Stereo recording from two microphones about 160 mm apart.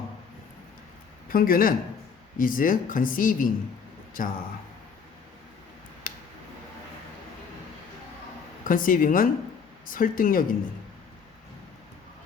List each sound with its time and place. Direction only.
1.3 s speech: 65° left (ahead or behind)
6.0 s a sound: 55° left (ahead or behind)
8.6 s speech: 60° left (ahead or behind)